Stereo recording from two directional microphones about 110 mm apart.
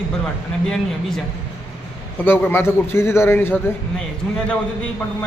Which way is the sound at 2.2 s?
20° left (ahead or behind).